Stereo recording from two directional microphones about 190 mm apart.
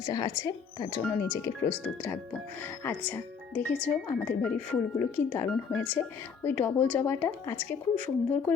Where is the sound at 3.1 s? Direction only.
10° left (ahead or behind).